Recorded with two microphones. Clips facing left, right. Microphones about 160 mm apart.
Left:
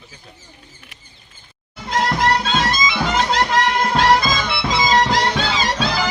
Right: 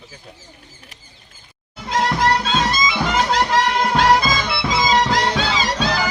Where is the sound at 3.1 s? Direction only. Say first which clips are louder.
Right 1 dB; 5° right (ahead or behind).